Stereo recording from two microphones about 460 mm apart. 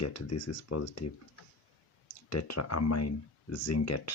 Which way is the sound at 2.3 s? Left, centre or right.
Left.